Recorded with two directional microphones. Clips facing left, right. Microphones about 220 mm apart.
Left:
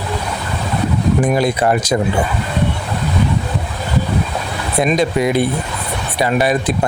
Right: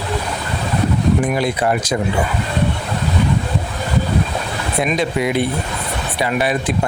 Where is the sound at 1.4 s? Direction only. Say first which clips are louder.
Left 3 dB; 40° left (ahead or behind).